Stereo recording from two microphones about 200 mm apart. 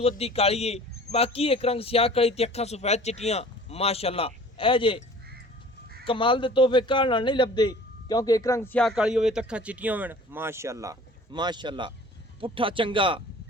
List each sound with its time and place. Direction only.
0.0 s a man's voice: 30° left (ahead or behind)
6.1 s a man's voice: 25° left (ahead or behind); by 13.2 s 25° right (ahead or behind)